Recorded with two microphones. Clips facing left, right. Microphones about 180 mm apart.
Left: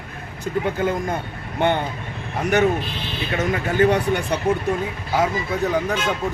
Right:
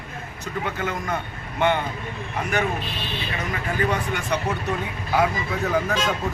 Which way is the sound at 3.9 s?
35° left (ahead or behind).